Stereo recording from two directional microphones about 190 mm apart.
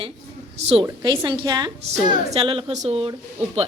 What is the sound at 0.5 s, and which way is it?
Speech, 35° right (ahead or behind).